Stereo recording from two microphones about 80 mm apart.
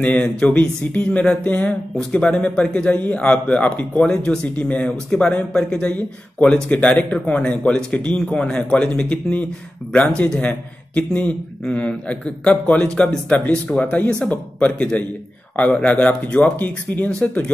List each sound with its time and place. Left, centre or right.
0.0 s a man's voice: centre